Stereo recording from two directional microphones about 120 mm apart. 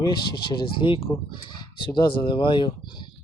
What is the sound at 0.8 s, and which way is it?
Speech, 50° left (ahead or behind).